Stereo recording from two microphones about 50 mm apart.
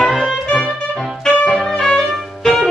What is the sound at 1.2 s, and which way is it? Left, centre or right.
Music, centre.